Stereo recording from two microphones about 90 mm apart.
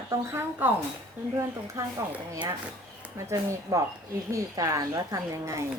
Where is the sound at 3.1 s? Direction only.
30° right (ahead or behind).